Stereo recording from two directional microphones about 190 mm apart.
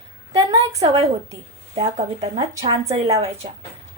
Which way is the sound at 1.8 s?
30° right (ahead or behind).